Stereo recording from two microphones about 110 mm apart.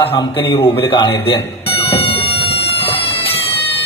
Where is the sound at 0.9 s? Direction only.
40° left (ahead or behind).